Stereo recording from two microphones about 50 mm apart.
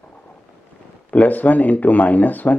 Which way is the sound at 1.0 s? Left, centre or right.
Left.